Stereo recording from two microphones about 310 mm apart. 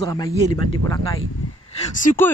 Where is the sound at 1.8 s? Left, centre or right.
Left.